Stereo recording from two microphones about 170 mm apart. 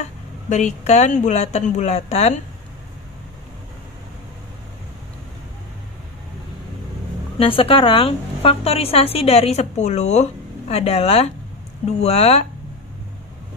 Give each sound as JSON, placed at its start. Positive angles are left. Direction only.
{"t": 0.5, "sound": "a woman's voice", "side_deg": 45}
{"t": 7.3, "sound": "a woman's voice", "side_deg": 35}